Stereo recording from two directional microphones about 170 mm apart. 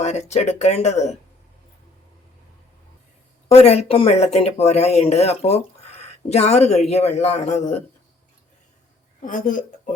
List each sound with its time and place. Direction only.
0.0 s speech: 40° left (ahead or behind)
3.5 s speech: 35° left (ahead or behind)
9.2 s a woman's voice: 50° left (ahead or behind)